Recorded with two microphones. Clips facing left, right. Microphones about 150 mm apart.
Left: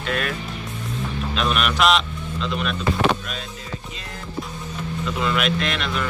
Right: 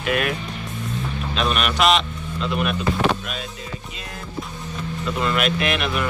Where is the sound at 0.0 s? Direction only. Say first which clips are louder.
Right 3 dB; 10° right (ahead or behind).